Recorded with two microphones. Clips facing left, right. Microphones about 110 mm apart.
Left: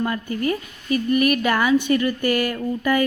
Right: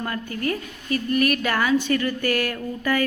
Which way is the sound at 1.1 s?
10° left (ahead or behind).